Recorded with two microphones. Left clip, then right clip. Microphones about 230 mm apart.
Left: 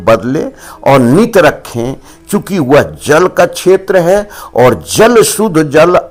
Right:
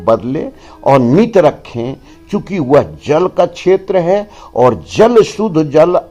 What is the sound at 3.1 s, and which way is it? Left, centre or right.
Speech, left.